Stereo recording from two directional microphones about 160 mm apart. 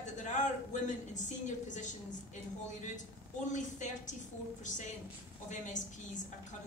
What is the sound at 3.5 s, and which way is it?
Speech, 50° left (ahead or behind).